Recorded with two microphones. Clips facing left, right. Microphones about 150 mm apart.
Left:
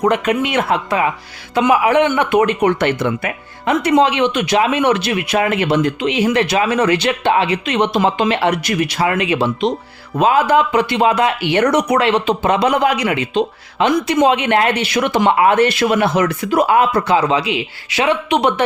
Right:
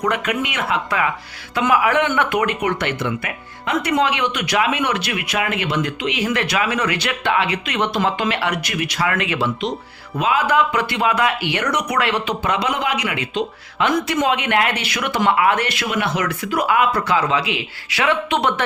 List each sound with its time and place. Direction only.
0.0 s speech: 25° left (ahead or behind)
10.2 s speech: 35° left (ahead or behind)
10.7 s speech: 20° left (ahead or behind)